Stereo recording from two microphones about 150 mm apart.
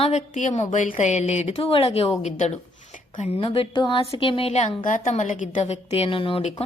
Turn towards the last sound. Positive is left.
turn(degrees=45)  # may be behind; listen again after turning